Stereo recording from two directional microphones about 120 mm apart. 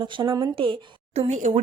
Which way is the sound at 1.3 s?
90° right.